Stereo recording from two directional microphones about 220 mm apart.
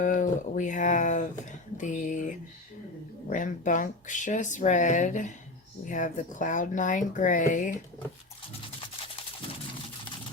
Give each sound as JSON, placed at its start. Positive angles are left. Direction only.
{"t": 0.0, "sound": "speech", "side_deg": 35}